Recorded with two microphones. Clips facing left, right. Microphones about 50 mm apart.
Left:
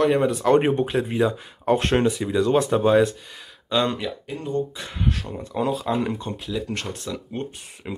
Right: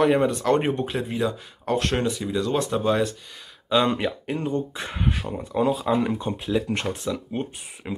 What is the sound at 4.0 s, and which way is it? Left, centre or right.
Speech, right.